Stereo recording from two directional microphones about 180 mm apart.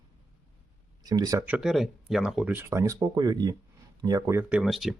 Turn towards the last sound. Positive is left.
turn(degrees=0)  # may be behind; listen again after turning